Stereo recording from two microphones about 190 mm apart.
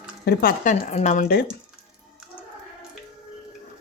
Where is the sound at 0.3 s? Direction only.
45° left (ahead or behind).